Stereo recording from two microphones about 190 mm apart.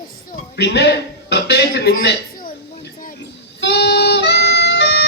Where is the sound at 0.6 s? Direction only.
65° left (ahead or behind).